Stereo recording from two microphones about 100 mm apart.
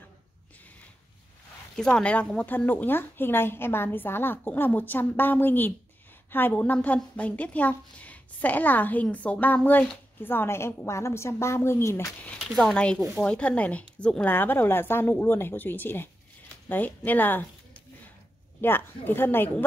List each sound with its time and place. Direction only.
1.8 s a woman's voice: 10° left (ahead or behind); by 12.1 s 25° left (ahead or behind)
12.4 s a woman's voice: 5° left (ahead or behind); by 16.1 s 20° left (ahead or behind)
16.6 s a sound: 15° left (ahead or behind)
18.6 s speech: 20° left (ahead or behind)